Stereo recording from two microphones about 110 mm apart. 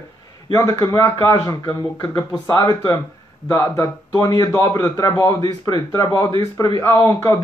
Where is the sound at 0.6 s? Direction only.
30° left (ahead or behind).